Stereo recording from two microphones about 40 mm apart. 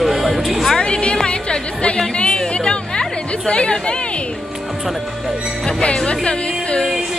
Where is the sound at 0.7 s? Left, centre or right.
Left.